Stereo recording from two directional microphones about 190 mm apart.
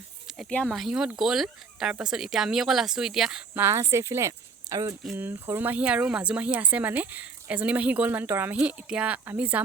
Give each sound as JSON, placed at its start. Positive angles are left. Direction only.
{"t": 0.3, "sound": "speech", "side_deg": 0}